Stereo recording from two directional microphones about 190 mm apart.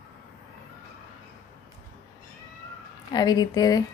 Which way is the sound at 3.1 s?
20° left (ahead or behind).